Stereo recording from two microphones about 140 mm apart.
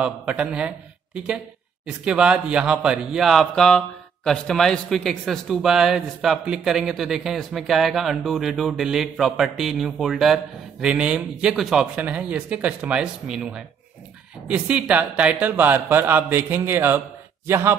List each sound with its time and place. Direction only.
0.0 s speech: 10° right (ahead or behind)